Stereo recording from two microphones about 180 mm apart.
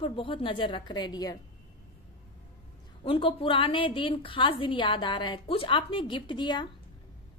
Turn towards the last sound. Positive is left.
turn(degrees=25)  # may be behind; listen again after turning